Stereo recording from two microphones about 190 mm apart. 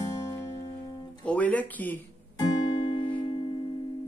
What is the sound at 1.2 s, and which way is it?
Speech, 10° left (ahead or behind).